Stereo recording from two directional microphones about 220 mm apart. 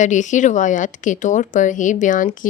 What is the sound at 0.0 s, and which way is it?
A woman's voice, 35° left (ahead or behind).